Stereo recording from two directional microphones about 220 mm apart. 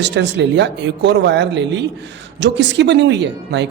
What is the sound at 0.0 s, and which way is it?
Speech, 50° right (ahead or behind).